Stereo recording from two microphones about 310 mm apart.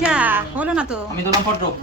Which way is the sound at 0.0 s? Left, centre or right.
Centre.